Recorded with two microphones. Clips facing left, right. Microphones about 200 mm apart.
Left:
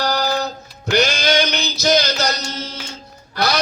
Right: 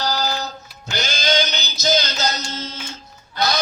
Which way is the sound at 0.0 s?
60° left (ahead or behind).